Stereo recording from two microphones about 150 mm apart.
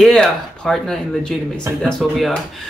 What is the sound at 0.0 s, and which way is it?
Speech, centre (ahead or behind).